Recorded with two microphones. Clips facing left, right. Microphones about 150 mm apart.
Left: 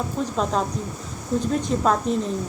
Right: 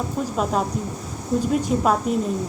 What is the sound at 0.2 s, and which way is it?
Speech, 10° right (ahead or behind).